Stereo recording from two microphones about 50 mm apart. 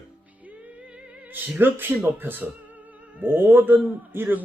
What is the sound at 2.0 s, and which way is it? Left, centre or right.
Music, right.